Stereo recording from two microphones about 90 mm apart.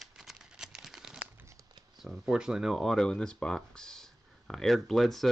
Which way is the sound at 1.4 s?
35° right (ahead or behind).